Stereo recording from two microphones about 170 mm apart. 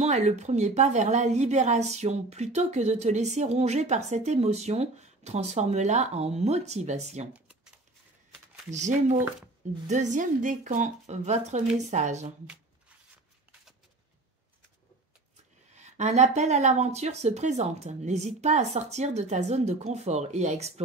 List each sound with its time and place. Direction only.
0.0 s a woman's voice: 40° right (ahead or behind)
8.6 s a woman's voice: 45° right (ahead or behind)
15.7 s a woman's voice: 40° right (ahead or behind)